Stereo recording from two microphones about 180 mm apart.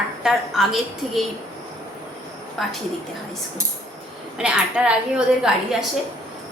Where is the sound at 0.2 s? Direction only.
Centre (ahead or behind).